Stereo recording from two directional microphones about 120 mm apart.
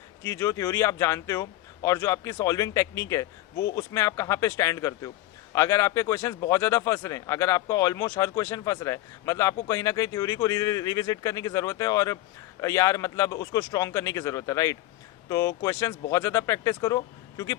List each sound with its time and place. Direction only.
0.2 s speech: 25° left (ahead or behind)